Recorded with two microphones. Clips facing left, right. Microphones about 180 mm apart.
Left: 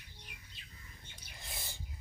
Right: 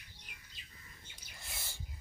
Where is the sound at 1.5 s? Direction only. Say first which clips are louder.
Left 2 dB; 15° left (ahead or behind).